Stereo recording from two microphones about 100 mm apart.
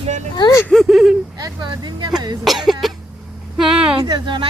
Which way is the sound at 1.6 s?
50° right (ahead or behind).